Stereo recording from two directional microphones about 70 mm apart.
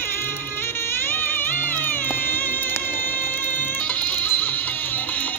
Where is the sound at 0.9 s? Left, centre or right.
Left.